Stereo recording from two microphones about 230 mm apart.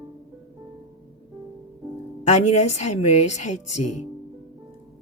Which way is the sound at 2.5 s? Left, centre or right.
Left.